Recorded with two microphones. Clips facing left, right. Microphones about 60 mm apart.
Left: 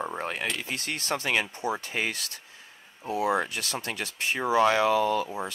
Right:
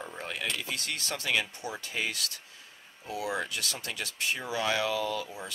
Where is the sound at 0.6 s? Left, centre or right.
Left.